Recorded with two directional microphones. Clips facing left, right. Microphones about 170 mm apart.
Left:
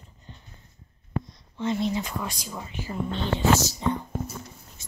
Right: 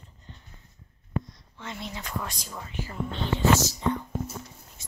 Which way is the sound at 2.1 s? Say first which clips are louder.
Left 2 dB; 10° left (ahead or behind).